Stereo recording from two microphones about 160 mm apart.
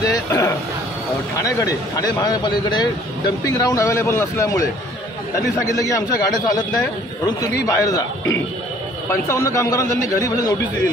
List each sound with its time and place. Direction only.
0.0 s a sound: 20° left (ahead or behind)
1.4 s speech: 25° left (ahead or behind)
5.7 s speech: 20° left (ahead or behind)